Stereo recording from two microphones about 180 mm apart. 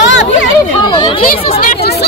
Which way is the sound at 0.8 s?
25° left (ahead or behind).